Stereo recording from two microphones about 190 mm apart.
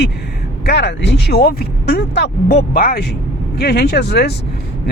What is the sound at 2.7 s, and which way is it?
Speech, 50° left (ahead or behind).